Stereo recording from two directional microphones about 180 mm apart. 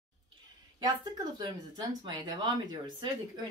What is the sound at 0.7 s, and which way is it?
Speech, 25° right (ahead or behind).